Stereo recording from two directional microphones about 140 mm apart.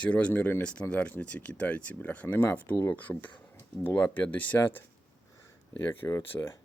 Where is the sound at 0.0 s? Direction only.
10° left (ahead or behind).